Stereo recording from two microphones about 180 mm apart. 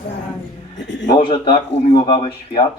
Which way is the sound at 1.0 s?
25° left (ahead or behind).